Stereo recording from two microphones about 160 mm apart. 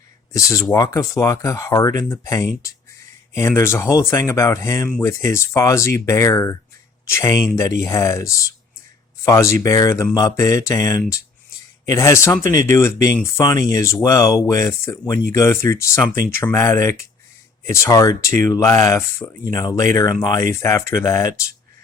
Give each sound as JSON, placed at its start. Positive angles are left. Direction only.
{"t": 0.3, "sound": "speech", "side_deg": 20}